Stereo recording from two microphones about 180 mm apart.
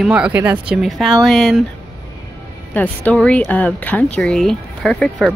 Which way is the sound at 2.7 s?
10° left (ahead or behind).